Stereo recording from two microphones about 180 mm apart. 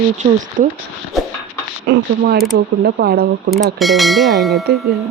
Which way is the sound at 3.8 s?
Centre (ahead or behind).